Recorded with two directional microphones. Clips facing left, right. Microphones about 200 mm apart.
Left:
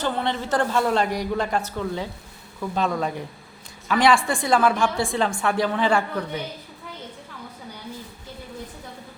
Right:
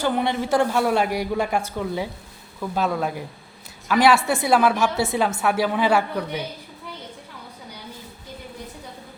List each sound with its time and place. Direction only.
0.0 s a woman's voice: 10° right (ahead or behind)